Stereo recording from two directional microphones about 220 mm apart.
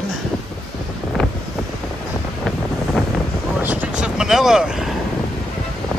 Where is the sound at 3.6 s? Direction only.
5° right (ahead or behind).